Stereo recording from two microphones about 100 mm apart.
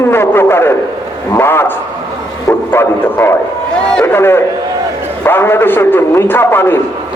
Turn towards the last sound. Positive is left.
turn(degrees=20)  # may be behind; listen again after turning